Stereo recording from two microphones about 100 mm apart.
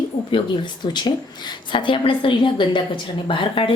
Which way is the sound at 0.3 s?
55° left (ahead or behind).